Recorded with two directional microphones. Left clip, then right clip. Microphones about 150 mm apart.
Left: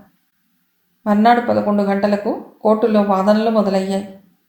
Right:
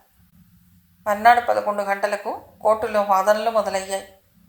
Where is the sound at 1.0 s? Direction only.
35° right (ahead or behind).